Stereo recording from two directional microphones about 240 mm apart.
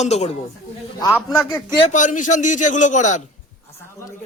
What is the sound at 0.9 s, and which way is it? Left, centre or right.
Speech, centre.